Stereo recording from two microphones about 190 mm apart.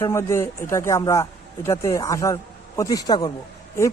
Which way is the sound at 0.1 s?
15° left (ahead or behind).